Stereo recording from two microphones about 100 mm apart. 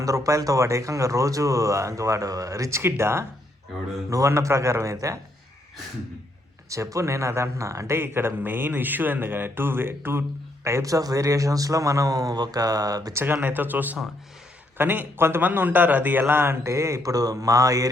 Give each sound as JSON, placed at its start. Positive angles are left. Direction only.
{"t": 0.0, "sound": "speech", "side_deg": -35}
{"t": 6.7, "sound": "speech", "side_deg": -30}
{"t": 13.1, "sound": "speech", "side_deg": -20}